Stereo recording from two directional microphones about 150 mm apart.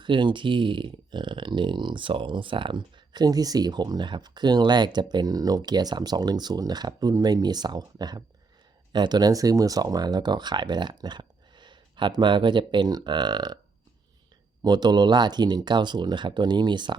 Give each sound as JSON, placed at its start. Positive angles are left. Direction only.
{"t": 0.0, "sound": "speech", "side_deg": -30}
{"t": 14.6, "sound": "speech", "side_deg": -30}